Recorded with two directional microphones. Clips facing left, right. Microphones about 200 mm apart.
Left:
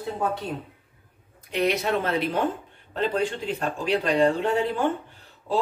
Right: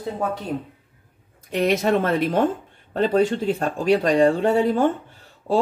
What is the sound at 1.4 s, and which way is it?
Speech, 45° right (ahead or behind).